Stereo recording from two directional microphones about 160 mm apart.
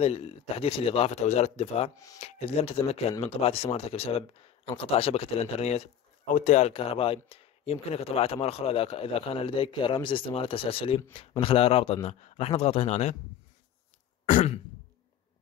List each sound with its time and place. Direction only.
0.0 s speech: 40° left (ahead or behind)